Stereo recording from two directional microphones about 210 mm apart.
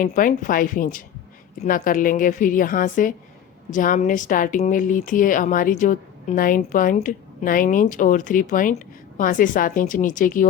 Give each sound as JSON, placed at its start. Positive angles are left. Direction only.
{"t": 0.0, "sound": "speech", "side_deg": 40}